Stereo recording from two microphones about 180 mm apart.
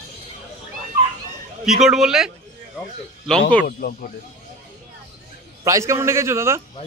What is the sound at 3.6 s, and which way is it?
Speech, 55° left (ahead or behind).